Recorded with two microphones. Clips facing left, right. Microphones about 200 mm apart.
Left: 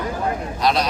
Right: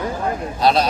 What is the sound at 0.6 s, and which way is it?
Speech, 30° right (ahead or behind).